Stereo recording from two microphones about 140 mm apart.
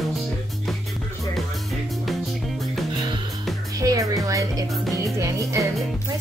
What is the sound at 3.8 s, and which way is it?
Music, 25° right (ahead or behind).